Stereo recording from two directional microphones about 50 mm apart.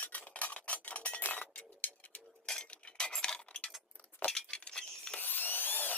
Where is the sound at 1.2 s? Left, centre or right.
Left.